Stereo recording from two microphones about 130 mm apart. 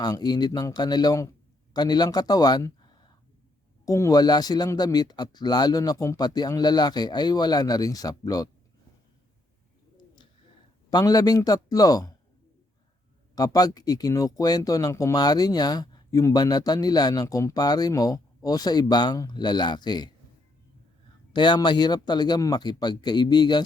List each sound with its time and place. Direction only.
0.0 s speech: 30° left (ahead or behind)
10.9 s a man's voice: 30° left (ahead or behind)
13.3 s speech: 30° left (ahead or behind)
21.3 s speech: 35° left (ahead or behind)